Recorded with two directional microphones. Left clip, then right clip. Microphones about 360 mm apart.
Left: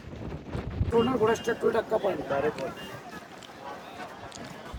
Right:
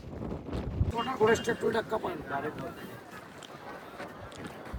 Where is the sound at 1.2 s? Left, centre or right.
Left.